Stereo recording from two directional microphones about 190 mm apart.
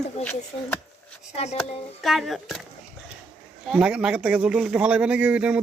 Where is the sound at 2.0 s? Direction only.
Centre (ahead or behind).